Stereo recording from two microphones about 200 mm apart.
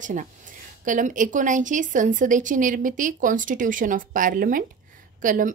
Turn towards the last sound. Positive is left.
turn(degrees=-40)  # may be behind; listen again after turning